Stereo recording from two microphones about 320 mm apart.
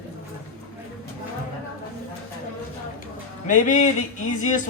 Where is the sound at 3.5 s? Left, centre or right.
Left.